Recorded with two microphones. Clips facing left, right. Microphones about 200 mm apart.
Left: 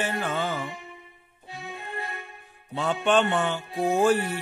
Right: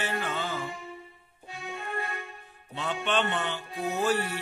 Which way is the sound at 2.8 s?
45° left (ahead or behind).